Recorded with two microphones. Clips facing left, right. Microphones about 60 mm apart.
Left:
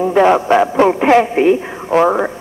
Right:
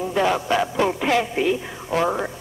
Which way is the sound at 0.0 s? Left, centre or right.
Left.